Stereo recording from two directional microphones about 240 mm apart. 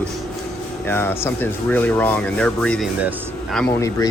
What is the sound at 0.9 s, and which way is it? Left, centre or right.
A man's voice, centre.